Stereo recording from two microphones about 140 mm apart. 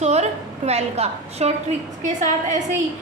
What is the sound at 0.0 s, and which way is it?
A woman's voice, 55° right (ahead or behind).